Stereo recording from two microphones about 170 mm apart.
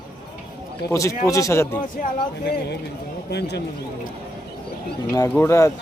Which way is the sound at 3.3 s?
75° left (ahead or behind).